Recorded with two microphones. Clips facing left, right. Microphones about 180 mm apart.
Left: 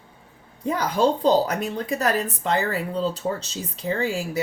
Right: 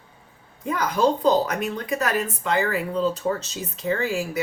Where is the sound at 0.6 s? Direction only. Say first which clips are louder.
Even; 30° left (ahead or behind).